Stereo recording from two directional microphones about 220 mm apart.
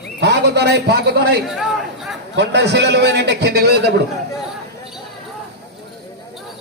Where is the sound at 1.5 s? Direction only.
Centre (ahead or behind).